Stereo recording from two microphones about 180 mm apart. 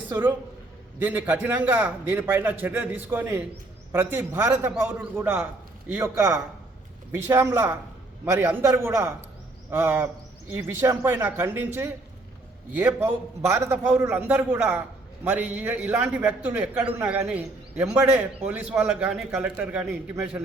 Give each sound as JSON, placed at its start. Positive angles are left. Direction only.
{"t": 0.1, "sound": "a man's voice", "side_deg": -15}